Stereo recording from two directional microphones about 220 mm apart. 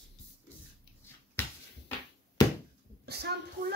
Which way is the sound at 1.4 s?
10° left (ahead or behind).